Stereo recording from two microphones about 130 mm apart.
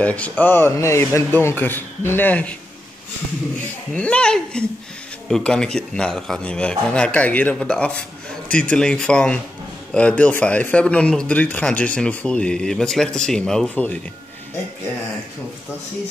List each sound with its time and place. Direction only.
0.0 s speech: 10° left (ahead or behind)
3.9 s speech: 10° left (ahead or behind)